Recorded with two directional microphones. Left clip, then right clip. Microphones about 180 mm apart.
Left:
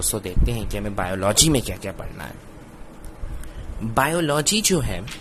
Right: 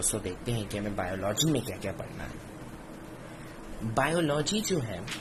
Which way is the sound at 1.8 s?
20° left (ahead or behind).